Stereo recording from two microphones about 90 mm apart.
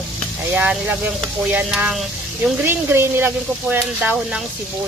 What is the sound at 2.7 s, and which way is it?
Speech, 25° right (ahead or behind).